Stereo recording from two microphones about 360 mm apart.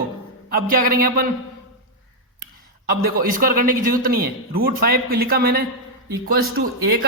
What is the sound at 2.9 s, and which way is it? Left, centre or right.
Speech, right.